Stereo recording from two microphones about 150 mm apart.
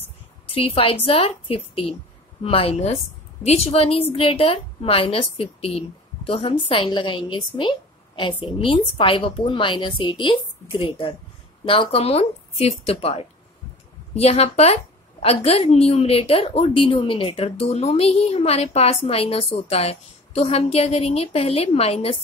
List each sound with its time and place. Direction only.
0.5 s a woman's voice: 40° left (ahead or behind)